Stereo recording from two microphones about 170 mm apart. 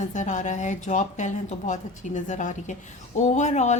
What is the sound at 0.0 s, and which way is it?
Speech, 45° left (ahead or behind).